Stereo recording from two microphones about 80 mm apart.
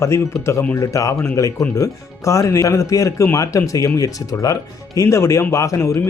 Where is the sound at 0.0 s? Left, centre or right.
Left.